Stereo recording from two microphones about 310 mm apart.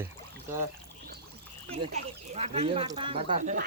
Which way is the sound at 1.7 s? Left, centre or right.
Centre.